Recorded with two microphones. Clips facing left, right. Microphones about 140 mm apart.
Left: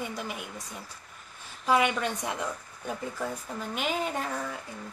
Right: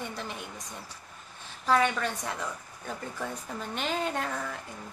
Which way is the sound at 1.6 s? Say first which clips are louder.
Left 1 dB; 15° left (ahead or behind).